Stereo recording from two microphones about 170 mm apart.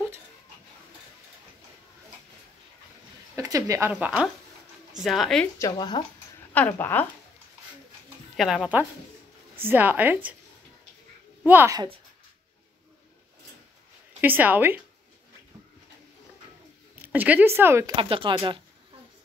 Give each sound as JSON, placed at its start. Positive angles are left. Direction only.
{"t": 3.3, "sound": "speech", "side_deg": -20}
{"t": 3.9, "sound": "speech", "side_deg": -5}
{"t": 5.7, "sound": "speech", "side_deg": 25}
{"t": 6.5, "sound": "speech", "side_deg": 10}
{"t": 8.4, "sound": "speech", "side_deg": 0}
{"t": 11.4, "sound": "speech", "side_deg": -15}
{"t": 14.2, "sound": "speech", "side_deg": -10}
{"t": 17.0, "sound": "speech", "side_deg": -10}
{"t": 17.9, "sound": "speech", "side_deg": -30}